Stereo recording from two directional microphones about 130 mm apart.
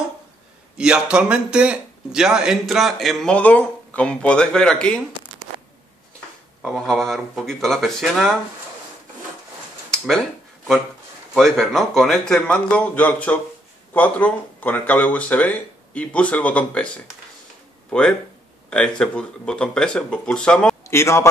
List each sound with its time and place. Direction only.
0.7 s speech: 5° right (ahead or behind)
6.6 s speech: centre (ahead or behind)
9.8 s a sound: 5° left (ahead or behind)
11.3 s speech: centre (ahead or behind)
20.9 s a man's voice: 20° left (ahead or behind)